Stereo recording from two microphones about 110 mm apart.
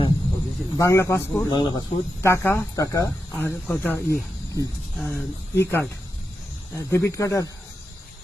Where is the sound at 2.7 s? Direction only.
30° left (ahead or behind).